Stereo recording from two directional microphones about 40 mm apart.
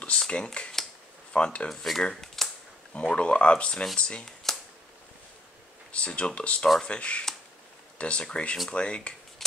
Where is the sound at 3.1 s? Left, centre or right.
Left.